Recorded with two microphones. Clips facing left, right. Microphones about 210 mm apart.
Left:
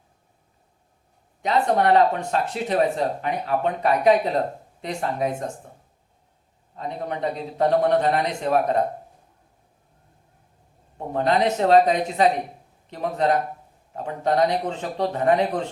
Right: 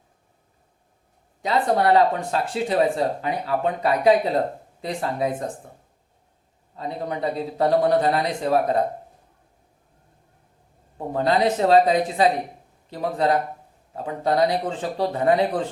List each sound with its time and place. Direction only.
1.4 s speech: 35° right (ahead or behind)
6.7 s speech: 35° right (ahead or behind)
11.1 s speech: 35° right (ahead or behind)